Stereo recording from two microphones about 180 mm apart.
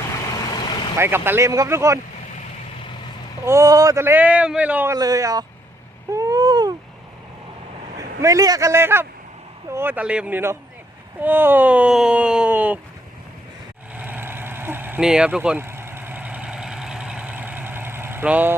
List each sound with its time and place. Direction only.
0.3 s vehicle: 20° left (ahead or behind)
0.9 s a man's voice: 15° right (ahead or behind)
3.4 s a man's voice: 15° right (ahead or behind)
6.1 s a sound: 20° right (ahead or behind)
8.2 s a man's voice: 20° right (ahead or behind)
13.9 s vehicle: 10° right (ahead or behind)